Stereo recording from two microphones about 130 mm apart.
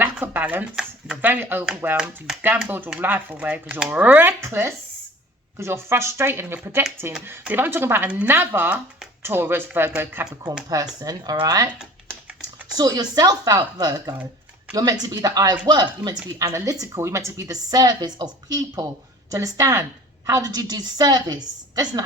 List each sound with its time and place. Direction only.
0.0 s a woman's voice: 15° right (ahead or behind)
10.7 s a woman's voice: 30° right (ahead or behind)
12.7 s a woman's voice: 30° right (ahead or behind)